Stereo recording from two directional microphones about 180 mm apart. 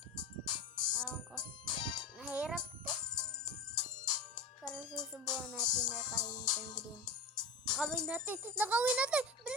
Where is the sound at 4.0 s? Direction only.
25° left (ahead or behind).